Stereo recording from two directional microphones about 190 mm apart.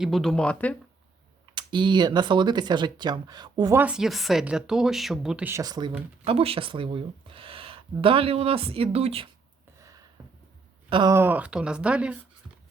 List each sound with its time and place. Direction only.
0.0 s speech: centre (ahead or behind)
1.5 s speech: 25° right (ahead or behind)
3.8 s speech: 5° right (ahead or behind); by 9.3 s 30° right (ahead or behind)
9.7 s a sound: 15° right (ahead or behind)
10.8 s speech: 25° right (ahead or behind)
11.1 s speech: 10° right (ahead or behind)